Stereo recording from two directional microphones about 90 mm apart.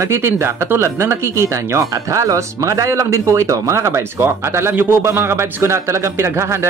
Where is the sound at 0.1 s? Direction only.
30° right (ahead or behind).